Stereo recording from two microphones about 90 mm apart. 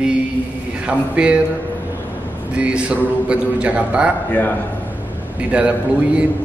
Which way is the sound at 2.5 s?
15° right (ahead or behind).